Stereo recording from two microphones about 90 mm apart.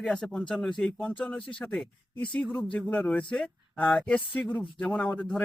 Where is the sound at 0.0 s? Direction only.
10° left (ahead or behind).